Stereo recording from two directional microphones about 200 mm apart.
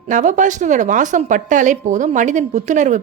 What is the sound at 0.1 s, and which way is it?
A woman's voice, 40° right (ahead or behind).